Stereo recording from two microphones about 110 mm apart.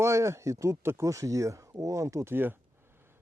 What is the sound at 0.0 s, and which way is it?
Speech, 25° right (ahead or behind).